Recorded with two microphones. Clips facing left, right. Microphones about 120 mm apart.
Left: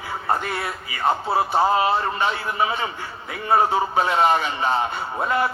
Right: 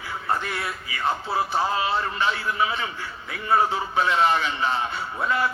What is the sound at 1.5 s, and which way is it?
A man's voice, 40° left (ahead or behind).